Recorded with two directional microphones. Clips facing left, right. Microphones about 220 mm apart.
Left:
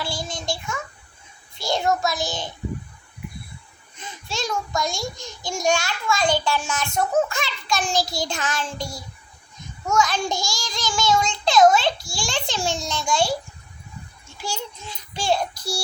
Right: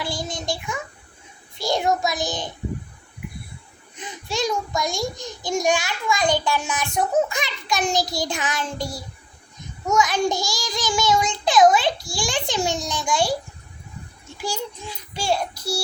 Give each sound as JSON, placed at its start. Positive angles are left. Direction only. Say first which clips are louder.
{"t": 0.0, "sound": "child singing", "louder": "right 1 dB", "side_deg": -20}
{"t": 1.5, "sound": "a child's voice", "louder": "right 1 dB", "side_deg": -15}
{"t": 3.9, "sound": "a child's voice", "louder": "right 4 dB", "side_deg": -15}
{"t": 14.4, "sound": "a child's voice", "louder": "right 3 dB", "side_deg": -15}